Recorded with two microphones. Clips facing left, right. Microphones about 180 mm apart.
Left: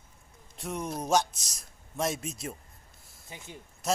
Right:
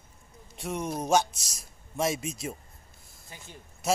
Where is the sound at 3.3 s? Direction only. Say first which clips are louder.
Left 3 dB; 20° left (ahead or behind).